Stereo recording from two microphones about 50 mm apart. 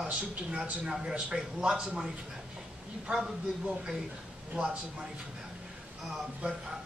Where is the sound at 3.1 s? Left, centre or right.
Centre.